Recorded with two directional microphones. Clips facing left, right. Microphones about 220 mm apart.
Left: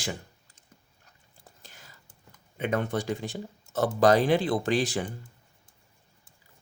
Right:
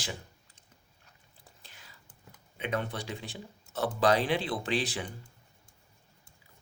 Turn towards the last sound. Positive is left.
turn(degrees=45)  # may be behind; listen again after turning